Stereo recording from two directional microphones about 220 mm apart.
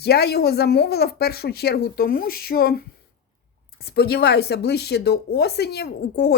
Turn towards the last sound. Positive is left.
turn(degrees=50)  # may be behind; listen again after turning